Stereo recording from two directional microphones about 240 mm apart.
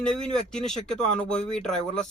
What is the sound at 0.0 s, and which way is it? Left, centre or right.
Speech, centre.